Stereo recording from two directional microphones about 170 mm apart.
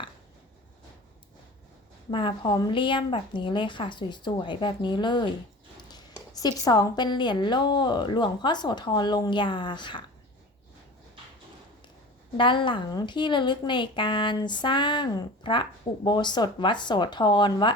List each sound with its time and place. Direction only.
2.0 s a woman's voice: 30° left (ahead or behind)
12.4 s a woman's voice: 30° left (ahead or behind)